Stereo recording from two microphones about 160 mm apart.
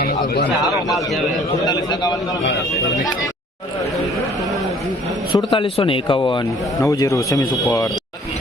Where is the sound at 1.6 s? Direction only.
25° left (ahead or behind).